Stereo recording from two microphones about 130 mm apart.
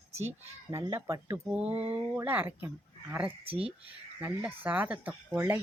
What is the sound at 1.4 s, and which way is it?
Speech, 10° right (ahead or behind).